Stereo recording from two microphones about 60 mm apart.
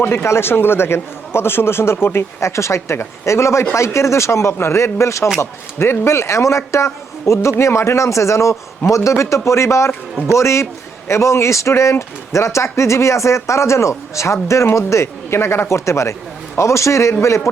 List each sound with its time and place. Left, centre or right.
0.0 s speech: left